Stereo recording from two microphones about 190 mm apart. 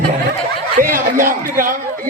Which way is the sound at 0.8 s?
45° right (ahead or behind).